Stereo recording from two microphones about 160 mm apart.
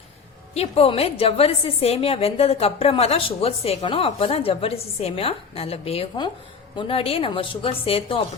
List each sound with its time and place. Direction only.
0.5 s a woman's voice: 40° left (ahead or behind)